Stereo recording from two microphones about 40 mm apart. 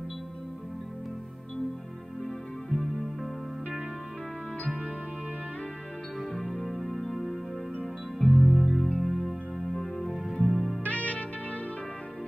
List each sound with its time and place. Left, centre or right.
2.7 s music: centre
6.3 s music: centre
9.8 s music: centre
10.8 s music: left